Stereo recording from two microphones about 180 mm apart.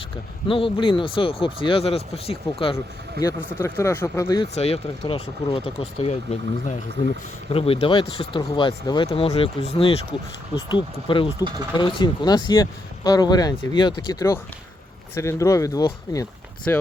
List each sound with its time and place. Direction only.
0.4 s speech: 30° left (ahead or behind)
2.7 s speech: 15° left (ahead or behind)
4.5 s speech: 35° left (ahead or behind); by 16.8 s 15° left (ahead or behind)